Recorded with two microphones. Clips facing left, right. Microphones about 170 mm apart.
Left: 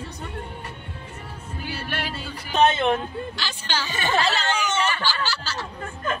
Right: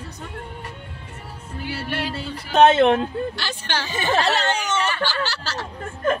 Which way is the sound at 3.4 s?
60° right (ahead or behind).